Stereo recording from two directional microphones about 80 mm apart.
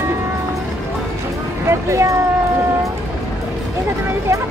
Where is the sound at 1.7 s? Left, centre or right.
Right.